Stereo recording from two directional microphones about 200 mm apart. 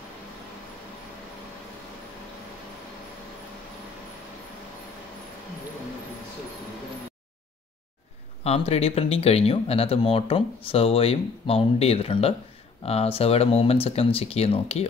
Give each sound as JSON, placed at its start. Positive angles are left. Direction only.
{"t": 8.5, "sound": "speech", "side_deg": 30}